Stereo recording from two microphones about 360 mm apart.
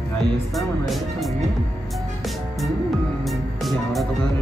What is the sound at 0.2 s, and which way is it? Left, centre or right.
Speech, centre.